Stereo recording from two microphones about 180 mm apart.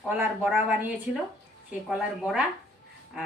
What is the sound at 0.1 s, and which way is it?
Speech, 10° right (ahead or behind).